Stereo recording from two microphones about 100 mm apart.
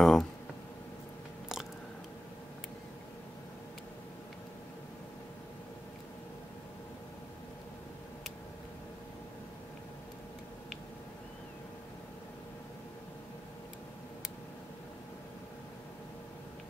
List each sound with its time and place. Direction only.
0.0 s speech: 5° left (ahead or behind)